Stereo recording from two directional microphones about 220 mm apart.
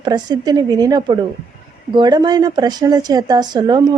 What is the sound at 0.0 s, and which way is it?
A woman's voice, 20° right (ahead or behind).